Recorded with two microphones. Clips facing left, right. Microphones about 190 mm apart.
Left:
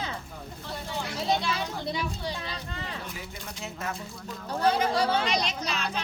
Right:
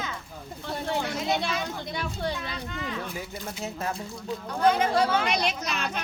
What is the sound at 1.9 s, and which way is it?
Speech, 55° right (ahead or behind).